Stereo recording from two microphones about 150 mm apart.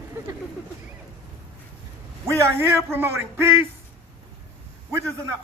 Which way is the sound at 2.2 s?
15° right (ahead or behind).